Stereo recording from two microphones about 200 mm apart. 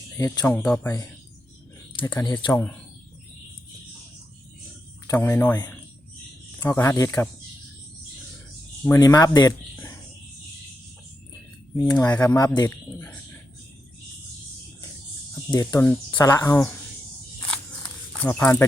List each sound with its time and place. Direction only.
0.2 s speech: 15° left (ahead or behind)
2.2 s speech: 20° left (ahead or behind)
5.0 s speech: 15° left (ahead or behind)
6.6 s speech: 10° left (ahead or behind)
8.8 s speech: 15° left (ahead or behind)
11.8 s speech: 10° left (ahead or behind)
15.4 s speech: 15° left (ahead or behind)
18.2 s speech: 10° left (ahead or behind)